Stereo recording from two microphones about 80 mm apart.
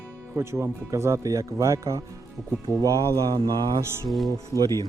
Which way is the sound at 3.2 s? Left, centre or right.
Right.